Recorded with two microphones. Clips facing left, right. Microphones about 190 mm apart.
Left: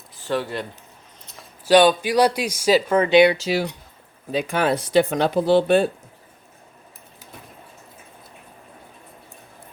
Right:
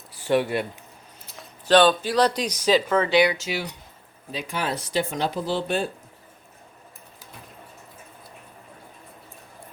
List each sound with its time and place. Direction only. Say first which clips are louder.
0.3 s speech: right 3 dB; 15° right (ahead or behind)
1.4 s speech: left 3 dB; 10° left (ahead or behind)
3.3 s speech: left 7 dB; 35° left (ahead or behind)
4.3 s speech: left 8 dB; 55° left (ahead or behind)